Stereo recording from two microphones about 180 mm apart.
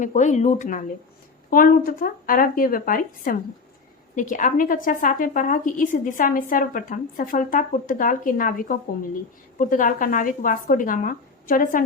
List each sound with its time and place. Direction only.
0.0 s speech: 40° left (ahead or behind)